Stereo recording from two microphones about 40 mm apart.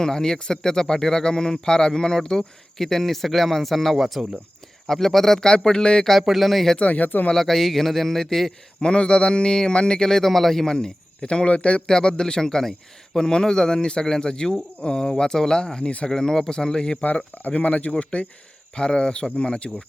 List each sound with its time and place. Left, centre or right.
0.0 s speech: centre
4.0 s speech: centre
4.9 s speech: centre
5.5 s a man's voice: centre
6.2 s speech: centre
6.7 s speech: left
7.3 s speech: centre
8.8 s a man's voice: left
10.8 s a man's voice: left
17.0 s speech: left
17.5 s speech: left
18.8 s a man's voice: left